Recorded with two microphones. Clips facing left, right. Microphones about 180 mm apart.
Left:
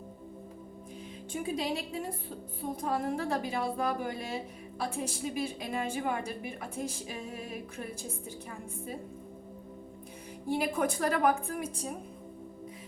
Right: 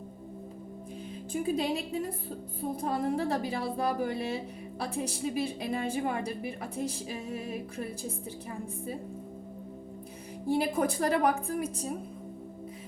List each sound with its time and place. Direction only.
1.3 s a woman's voice: 35° right (ahead or behind)
10.5 s a woman's voice: 35° right (ahead or behind)